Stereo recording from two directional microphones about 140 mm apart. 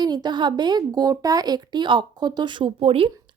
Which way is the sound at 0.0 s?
30° right (ahead or behind).